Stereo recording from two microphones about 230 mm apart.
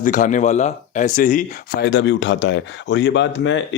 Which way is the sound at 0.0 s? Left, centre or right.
Left.